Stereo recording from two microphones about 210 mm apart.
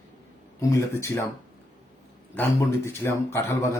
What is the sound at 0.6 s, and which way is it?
Speech, 15° left (ahead or behind).